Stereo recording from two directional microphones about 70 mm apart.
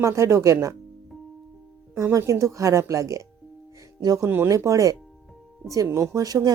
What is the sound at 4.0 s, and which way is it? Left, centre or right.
Speech, right.